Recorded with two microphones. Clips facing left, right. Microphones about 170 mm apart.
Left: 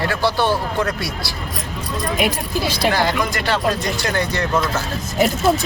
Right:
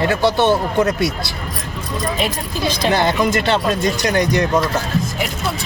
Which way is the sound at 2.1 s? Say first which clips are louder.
Left 1 dB; 10° left (ahead or behind).